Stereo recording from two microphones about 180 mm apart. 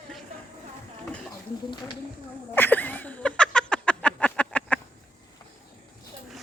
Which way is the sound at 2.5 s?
10° left (ahead or behind).